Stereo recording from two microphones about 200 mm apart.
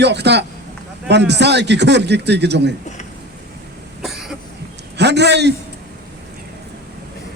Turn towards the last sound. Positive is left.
turn(degrees=-60)  # may be behind; listen again after turning